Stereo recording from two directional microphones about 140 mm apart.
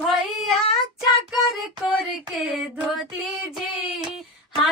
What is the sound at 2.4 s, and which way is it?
Female singing, centre (ahead or behind).